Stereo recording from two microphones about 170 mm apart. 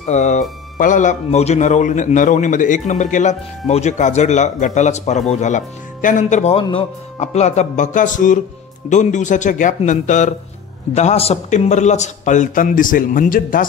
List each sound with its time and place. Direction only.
0.0 s speech: 40° left (ahead or behind)